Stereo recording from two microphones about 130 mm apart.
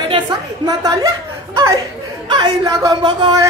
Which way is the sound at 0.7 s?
30° right (ahead or behind).